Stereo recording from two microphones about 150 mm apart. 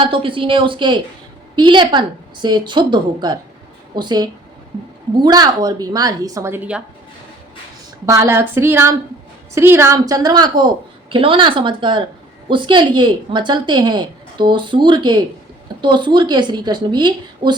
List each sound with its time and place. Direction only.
0.0 s a woman's voice: 35° right (ahead or behind); by 6.8 s 10° right (ahead or behind)
8.0 s a woman's voice: 20° right (ahead or behind)